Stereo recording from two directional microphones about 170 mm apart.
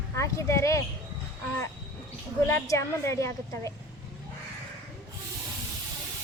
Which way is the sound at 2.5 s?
15° left (ahead or behind).